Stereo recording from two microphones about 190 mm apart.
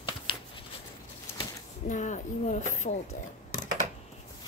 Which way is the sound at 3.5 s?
40° left (ahead or behind).